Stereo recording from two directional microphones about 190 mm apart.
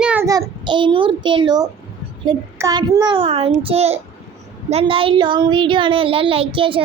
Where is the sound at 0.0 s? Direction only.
5° right (ahead or behind).